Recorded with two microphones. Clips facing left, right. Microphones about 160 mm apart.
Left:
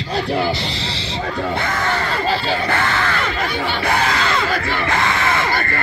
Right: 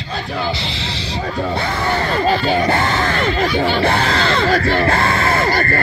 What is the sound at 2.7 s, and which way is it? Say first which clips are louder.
Music: right 3 dB; 35° right (ahead or behind).